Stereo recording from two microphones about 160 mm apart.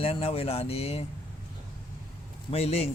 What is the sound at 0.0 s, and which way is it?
Speech, 35° left (ahead or behind).